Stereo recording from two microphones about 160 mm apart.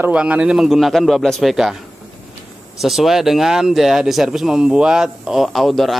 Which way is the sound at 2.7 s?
Centre (ahead or behind).